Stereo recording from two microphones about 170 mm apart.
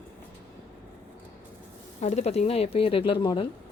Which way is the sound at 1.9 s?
40° left (ahead or behind).